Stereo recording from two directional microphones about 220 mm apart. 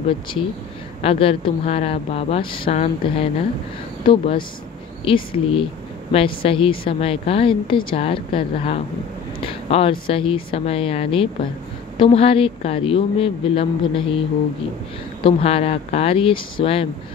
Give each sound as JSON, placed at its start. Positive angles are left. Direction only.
{"t": 1.0, "sound": "a woman's voice", "side_deg": 25}
{"t": 15.2, "sound": "a woman's voice", "side_deg": 25}